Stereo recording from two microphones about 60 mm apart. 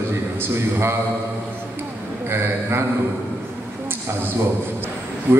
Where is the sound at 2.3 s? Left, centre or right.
Right.